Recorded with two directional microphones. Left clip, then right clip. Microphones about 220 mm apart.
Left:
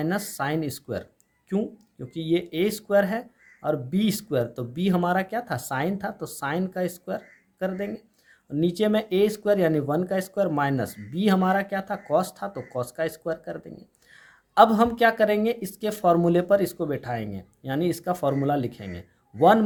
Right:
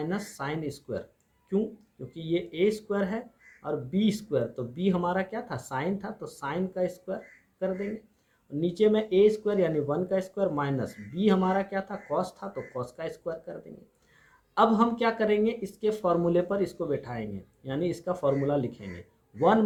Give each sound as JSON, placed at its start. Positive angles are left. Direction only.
{"t": 0.0, "sound": "speech", "side_deg": 50}
{"t": 2.1, "sound": "speech", "side_deg": 50}
{"t": 8.6, "sound": "speech", "side_deg": 50}